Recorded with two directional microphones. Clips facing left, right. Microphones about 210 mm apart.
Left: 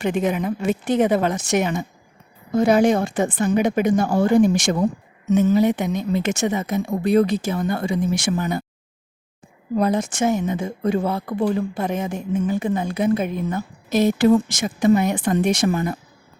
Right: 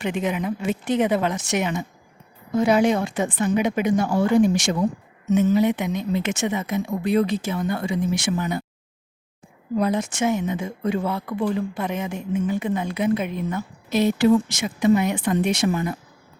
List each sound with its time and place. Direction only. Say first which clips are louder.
0.0 s speech: left 3 dB; 45° left (ahead or behind)
5.3 s speech: left 2 dB; 40° left (ahead or behind)
9.7 s speech: left 2 dB; 40° left (ahead or behind)